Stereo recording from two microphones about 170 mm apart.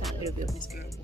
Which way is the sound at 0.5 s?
55° left (ahead or behind).